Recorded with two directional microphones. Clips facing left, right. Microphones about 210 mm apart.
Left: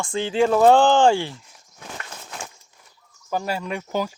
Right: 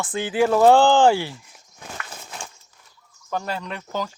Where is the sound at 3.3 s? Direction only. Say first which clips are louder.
Left 2 dB; 10° left (ahead or behind).